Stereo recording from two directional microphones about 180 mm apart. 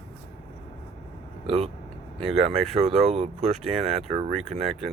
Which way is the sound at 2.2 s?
30° right (ahead or behind).